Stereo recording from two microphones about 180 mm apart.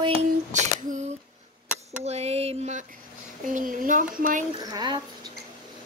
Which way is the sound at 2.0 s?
35° right (ahead or behind).